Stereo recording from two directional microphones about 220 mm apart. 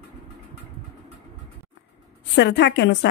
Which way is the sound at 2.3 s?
55° left (ahead or behind).